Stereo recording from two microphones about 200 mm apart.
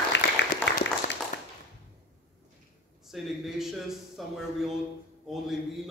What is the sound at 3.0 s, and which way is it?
Speech, centre (ahead or behind).